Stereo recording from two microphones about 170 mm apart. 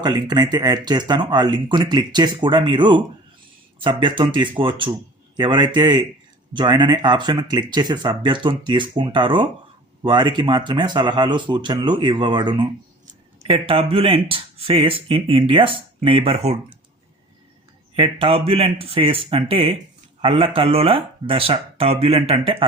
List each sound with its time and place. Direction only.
0.0 s speech: 25° right (ahead or behind)
17.9 s speech: 35° right (ahead or behind)